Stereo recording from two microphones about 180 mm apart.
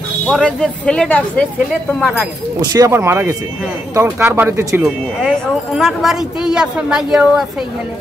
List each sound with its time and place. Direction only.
0.3 s a woman's voice: 5° left (ahead or behind)
2.6 s speech: 20° right (ahead or behind)
5.8 s a woman's voice: centre (ahead or behind)